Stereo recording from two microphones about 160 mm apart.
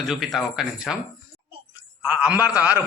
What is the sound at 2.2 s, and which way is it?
Speech, 10° right (ahead or behind).